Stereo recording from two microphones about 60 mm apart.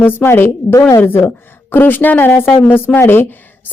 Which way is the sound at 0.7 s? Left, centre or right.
Left.